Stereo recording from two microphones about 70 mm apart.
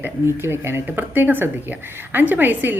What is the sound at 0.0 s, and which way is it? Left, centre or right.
A man's voice, right.